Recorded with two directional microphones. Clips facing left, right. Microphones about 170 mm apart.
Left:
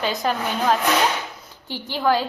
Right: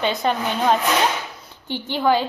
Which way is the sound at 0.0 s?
Centre (ahead or behind).